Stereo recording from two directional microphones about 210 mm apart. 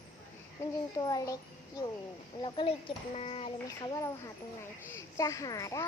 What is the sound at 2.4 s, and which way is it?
Speech, 25° left (ahead or behind).